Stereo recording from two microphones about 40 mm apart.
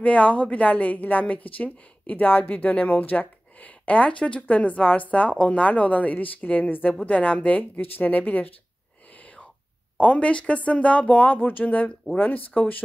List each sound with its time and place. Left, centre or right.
0.0 s a woman's voice: left
7.8 s speech: left
8.1 s a woman's voice: left
9.9 s a woman's voice: left
11.3 s speech: left